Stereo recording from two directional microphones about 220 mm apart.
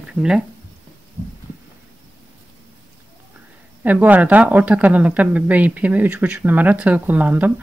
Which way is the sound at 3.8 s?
5° right (ahead or behind).